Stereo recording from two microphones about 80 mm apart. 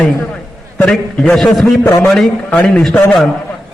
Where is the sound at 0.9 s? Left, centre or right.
Centre.